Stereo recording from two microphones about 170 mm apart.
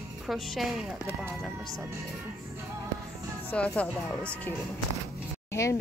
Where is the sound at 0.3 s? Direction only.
Centre (ahead or behind).